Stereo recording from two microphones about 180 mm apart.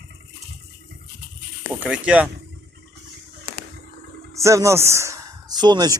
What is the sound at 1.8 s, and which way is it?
Speech, 5° right (ahead or behind).